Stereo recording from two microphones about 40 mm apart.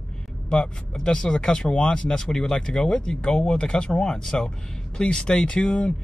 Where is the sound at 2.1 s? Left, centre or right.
Centre.